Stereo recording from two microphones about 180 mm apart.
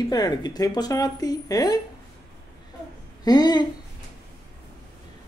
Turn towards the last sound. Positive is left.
turn(degrees=20)  # may be behind; listen again after turning